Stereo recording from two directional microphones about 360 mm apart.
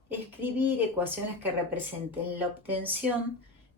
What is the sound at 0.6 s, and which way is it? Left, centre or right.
Speech, centre.